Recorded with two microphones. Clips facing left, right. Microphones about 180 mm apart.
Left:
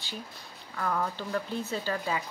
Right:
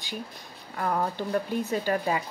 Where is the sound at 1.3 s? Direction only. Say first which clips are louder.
Right 5 dB; 15° right (ahead or behind).